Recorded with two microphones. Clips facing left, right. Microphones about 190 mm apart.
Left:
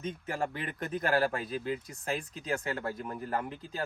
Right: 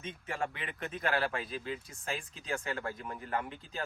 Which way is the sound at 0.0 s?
40° left (ahead or behind).